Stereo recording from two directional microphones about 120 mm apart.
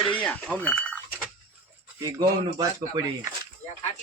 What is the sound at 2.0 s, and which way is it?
Speech, 35° right (ahead or behind).